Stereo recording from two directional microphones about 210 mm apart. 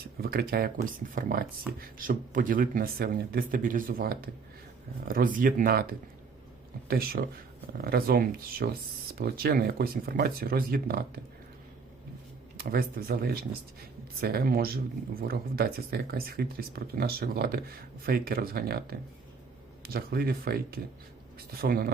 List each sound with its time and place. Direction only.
0.2 s speech: 45° right (ahead or behind)
12.5 s speech: 45° right (ahead or behind)